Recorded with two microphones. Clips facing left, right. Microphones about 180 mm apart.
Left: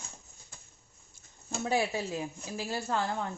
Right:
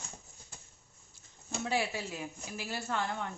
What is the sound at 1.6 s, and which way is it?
A woman's voice, 35° left (ahead or behind).